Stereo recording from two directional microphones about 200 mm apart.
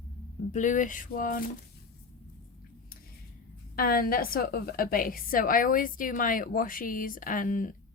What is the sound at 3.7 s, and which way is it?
Speech, 50° left (ahead or behind).